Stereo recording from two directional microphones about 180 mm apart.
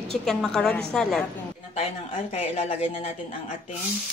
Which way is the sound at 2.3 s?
35° left (ahead or behind).